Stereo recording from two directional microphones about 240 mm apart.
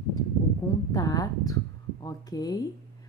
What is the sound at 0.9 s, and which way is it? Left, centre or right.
Speech, centre.